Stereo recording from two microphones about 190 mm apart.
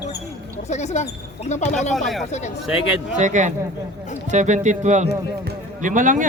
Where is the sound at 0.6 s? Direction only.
35° left (ahead or behind).